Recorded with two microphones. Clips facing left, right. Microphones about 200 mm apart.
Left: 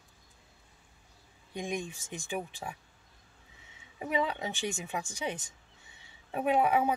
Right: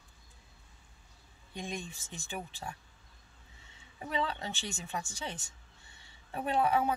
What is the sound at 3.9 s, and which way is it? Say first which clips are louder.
A woman's voice: left 4 dB; 10° left (ahead or behind).